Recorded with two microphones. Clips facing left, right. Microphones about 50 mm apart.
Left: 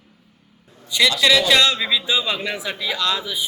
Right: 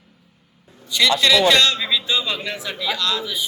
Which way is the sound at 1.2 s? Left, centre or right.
Centre.